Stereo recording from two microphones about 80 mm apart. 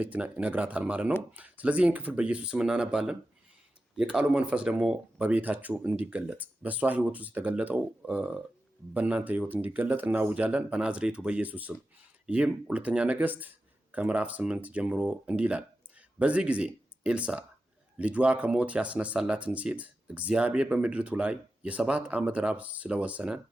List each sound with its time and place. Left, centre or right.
0.0 s speech: centre